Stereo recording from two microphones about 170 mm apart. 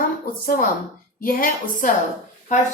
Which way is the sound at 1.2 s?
55° left (ahead or behind).